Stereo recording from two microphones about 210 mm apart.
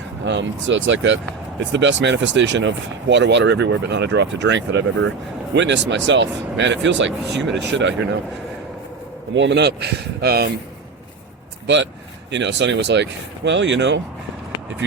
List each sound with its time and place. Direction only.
0.3 s speech: 60° right (ahead or behind)
9.3 s speech: 60° right (ahead or behind)
11.6 s speech: 60° right (ahead or behind)